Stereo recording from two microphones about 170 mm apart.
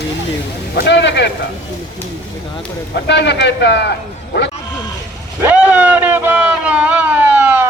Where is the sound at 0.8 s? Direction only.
90° left.